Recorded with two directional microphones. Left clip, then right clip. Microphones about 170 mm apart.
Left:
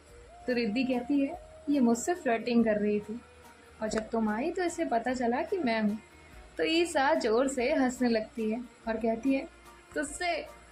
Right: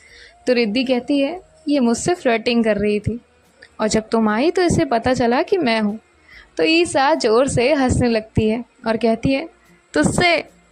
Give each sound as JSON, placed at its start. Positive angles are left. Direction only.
{"t": 0.4, "sound": "a woman's voice", "side_deg": -45}